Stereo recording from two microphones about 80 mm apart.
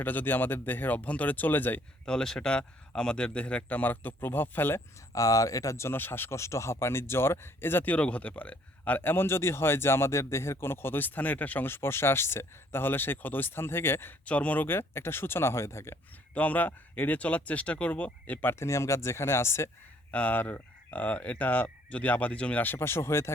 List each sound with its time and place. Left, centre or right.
0.0 s speech: left
2.0 s speech: centre; by 4.8 s left
5.1 s speech: left
14.3 s speech: centre; by 16.0 s left
16.3 s speech: centre
18.6 s speech: left
20.1 s speech: centre